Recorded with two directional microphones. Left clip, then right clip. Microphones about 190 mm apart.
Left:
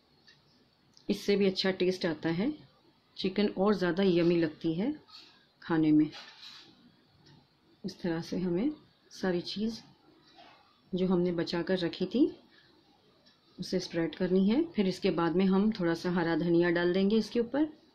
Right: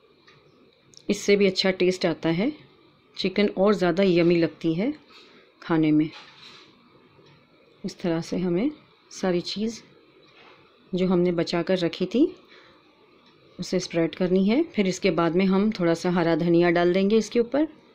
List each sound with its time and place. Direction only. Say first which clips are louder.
0.9 s speech: right 8 dB; 15° right (ahead or behind)
7.8 s speech: right 8 dB; 15° right (ahead or behind)
11.0 s speech: right 7 dB; 15° right (ahead or behind)
13.6 s speech: right 8 dB; 15° right (ahead or behind)